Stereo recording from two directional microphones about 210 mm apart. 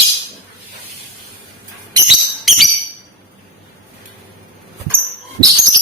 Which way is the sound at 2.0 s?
Centre (ahead or behind).